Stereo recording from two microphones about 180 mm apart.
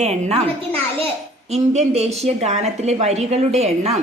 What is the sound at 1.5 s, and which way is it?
A woman's voice, 35° right (ahead or behind).